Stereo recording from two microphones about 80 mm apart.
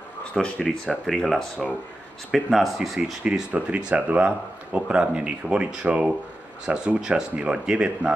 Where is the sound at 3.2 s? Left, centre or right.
Centre.